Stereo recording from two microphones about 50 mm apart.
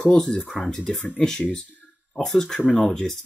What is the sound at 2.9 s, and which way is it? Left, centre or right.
Speech, centre.